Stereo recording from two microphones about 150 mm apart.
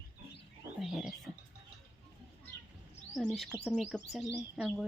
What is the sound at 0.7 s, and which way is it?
Wild animals, 5° right (ahead or behind).